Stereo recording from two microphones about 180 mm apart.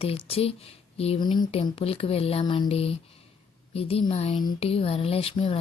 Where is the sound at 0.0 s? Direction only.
30° left (ahead or behind).